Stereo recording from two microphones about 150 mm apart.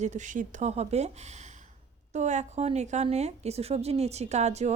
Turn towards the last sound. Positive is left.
turn(degrees=-45)  # may be behind; listen again after turning